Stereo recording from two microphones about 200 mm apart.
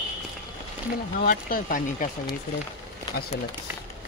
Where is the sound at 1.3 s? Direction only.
45° left (ahead or behind).